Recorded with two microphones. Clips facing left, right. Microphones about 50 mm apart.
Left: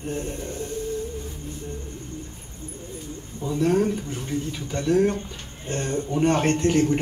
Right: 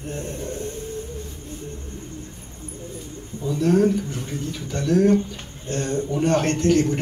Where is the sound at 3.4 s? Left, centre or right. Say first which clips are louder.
Right 3 dB; left.